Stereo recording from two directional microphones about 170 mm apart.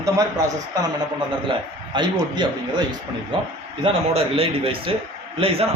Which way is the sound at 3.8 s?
35° right (ahead or behind).